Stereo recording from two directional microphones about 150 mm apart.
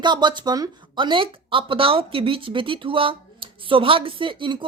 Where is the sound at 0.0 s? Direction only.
30° right (ahead or behind).